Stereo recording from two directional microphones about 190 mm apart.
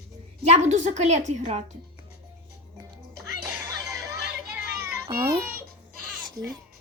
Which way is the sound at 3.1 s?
Centre (ahead or behind).